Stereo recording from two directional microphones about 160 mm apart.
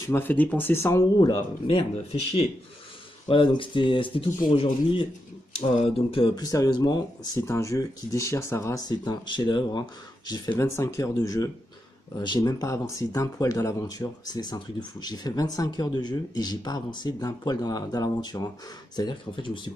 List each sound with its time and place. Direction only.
0.0 s speech: 15° left (ahead or behind); by 1.9 s 30° left (ahead or behind)
3.3 s speech: 30° left (ahead or behind)
5.6 s speech: 35° left (ahead or behind)
6.4 s speech: 20° left (ahead or behind)